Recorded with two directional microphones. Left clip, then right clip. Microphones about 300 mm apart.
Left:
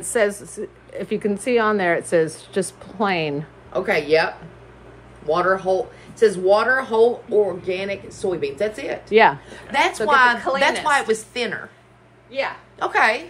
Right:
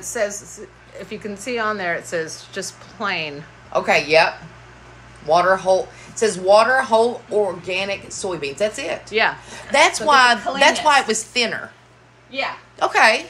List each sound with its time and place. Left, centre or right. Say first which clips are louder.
0.1 s speech: left 3 dB; left
3.7 s speech: right 3 dB; centre
5.3 s speech: right 4 dB; centre
9.1 s speech: left 5 dB; left
9.5 s a woman's voice: right 4 dB; centre